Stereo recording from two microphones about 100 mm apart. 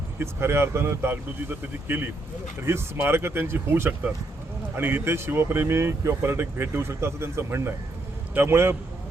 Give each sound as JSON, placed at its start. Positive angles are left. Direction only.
{"t": 0.2, "sound": "a man's voice", "side_deg": -25}